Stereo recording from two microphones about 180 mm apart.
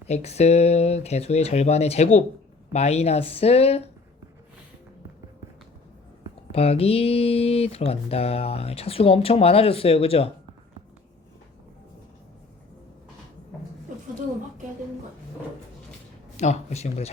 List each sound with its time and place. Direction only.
0.1 s speech: 35° left (ahead or behind)
6.5 s speech: 35° left (ahead or behind)
16.4 s speech: 40° left (ahead or behind)